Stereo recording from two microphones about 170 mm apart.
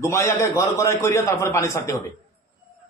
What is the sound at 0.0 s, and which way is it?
A man's voice, 15° left (ahead or behind).